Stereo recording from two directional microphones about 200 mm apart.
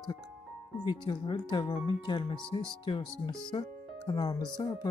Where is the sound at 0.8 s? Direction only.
20° left (ahead or behind).